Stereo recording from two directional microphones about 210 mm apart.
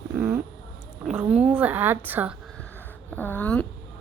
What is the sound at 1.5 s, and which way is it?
Music, 10° right (ahead or behind).